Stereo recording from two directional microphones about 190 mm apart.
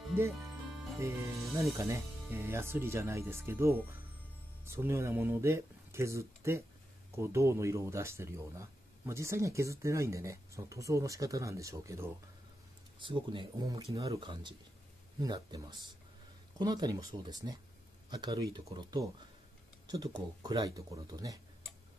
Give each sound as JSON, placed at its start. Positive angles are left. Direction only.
{"t": 0.9, "sound": "speech", "side_deg": -15}
{"t": 13.0, "sound": "speech", "side_deg": -25}